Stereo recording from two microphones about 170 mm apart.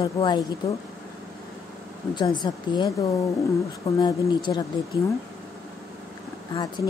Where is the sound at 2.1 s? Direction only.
25° left (ahead or behind).